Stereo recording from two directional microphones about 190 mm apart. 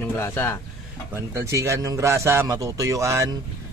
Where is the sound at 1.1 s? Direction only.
15° right (ahead or behind).